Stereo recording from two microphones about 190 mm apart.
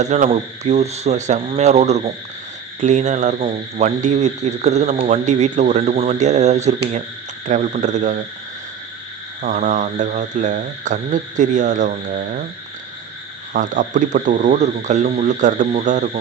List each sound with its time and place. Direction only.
0.0 s speech: 40° right (ahead or behind)
9.4 s speech: 45° right (ahead or behind)
13.5 s speech: 45° right (ahead or behind)